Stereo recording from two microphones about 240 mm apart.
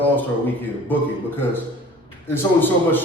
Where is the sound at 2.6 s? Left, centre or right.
Centre.